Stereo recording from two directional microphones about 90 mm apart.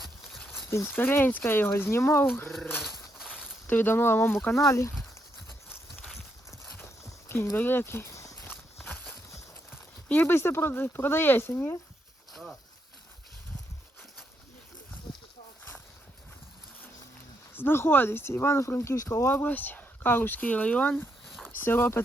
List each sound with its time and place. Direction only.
0.7 s speech: 25° left (ahead or behind)
3.2 s a sound: 5° right (ahead or behind)
3.7 s speech: 20° left (ahead or behind)
4.5 s speech: 35° left (ahead or behind)
5.6 s horse: 25° left (ahead or behind)
6.1 s horse: centre (ahead or behind)
6.7 s a sound: 25° left (ahead or behind)
7.5 s speech: 25° left (ahead or behind)
8.9 s a sound: 20° left (ahead or behind)
10.1 s speech: 25° left (ahead or behind)
12.3 s a sound: centre (ahead or behind)
17.5 s speech: 25° left (ahead or behind)